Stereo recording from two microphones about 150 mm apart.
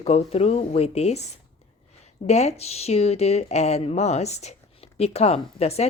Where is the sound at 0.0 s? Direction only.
45° left (ahead or behind).